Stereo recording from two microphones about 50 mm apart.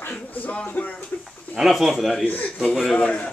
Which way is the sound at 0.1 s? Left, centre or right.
Left.